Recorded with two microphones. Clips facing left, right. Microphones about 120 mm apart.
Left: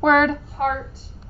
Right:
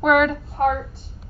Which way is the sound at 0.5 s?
55° right (ahead or behind).